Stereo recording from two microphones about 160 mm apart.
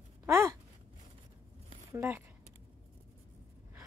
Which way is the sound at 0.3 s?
20° right (ahead or behind).